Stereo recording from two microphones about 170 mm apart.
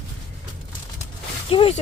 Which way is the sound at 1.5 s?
30° left (ahead or behind).